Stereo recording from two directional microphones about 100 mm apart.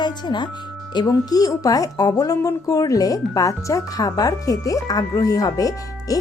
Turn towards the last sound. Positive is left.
turn(degrees=35)  # may be behind; listen again after turning